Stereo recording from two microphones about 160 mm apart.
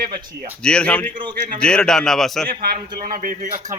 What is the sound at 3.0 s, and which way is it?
Speech, 60° right (ahead or behind).